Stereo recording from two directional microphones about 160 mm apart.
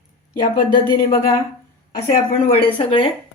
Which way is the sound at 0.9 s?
20° left (ahead or behind).